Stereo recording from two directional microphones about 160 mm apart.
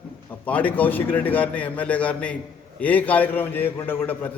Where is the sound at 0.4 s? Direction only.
10° left (ahead or behind).